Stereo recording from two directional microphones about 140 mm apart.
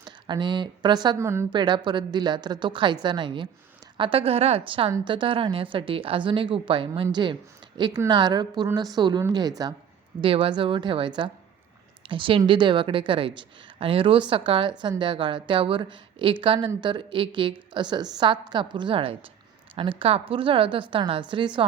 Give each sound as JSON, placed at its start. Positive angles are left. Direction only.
{"t": 0.0, "sound": "speech", "side_deg": -30}
{"t": 1.2, "sound": "a woman's voice", "side_deg": -20}
{"t": 1.5, "sound": "a woman's voice", "side_deg": -30}
{"t": 10.2, "sound": "speech", "side_deg": -40}